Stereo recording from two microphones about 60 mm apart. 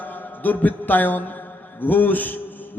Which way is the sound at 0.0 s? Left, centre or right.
Left.